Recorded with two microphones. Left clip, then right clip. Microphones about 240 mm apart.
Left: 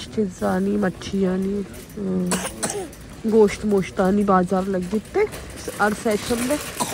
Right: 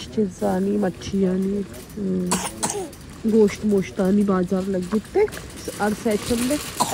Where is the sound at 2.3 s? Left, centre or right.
Centre.